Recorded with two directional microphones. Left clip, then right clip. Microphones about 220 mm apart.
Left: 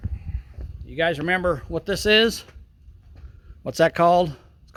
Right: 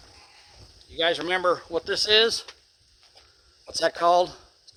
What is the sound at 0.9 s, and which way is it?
Speech, 45° left (ahead or behind).